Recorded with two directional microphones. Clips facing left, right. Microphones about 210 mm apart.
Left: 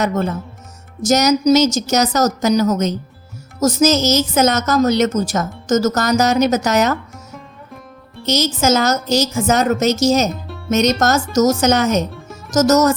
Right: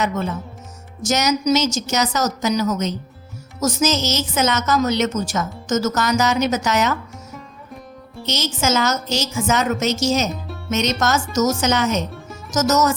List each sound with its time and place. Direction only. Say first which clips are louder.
0.0 s a woman's voice: left 4 dB; 45° left (ahead or behind)
8.3 s a woman's voice: left 5 dB; 40° left (ahead or behind)